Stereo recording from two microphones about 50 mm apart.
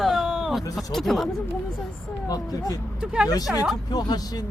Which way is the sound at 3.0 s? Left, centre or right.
Centre.